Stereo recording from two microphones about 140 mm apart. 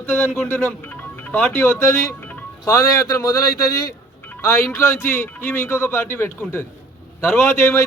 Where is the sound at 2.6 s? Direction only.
25° left (ahead or behind).